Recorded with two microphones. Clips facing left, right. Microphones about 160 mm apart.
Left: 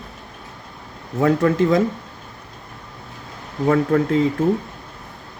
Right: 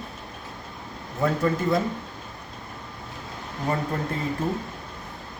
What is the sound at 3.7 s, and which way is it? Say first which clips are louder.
Speech: left 10 dB; 90° left.